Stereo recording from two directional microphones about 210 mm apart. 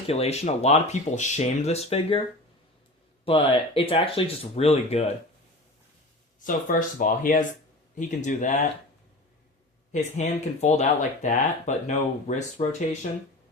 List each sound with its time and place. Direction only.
0.1 s speech: 30° left (ahead or behind)
3.2 s speech: 25° left (ahead or behind)
6.4 s speech: 40° left (ahead or behind)
9.9 s speech: 30° left (ahead or behind)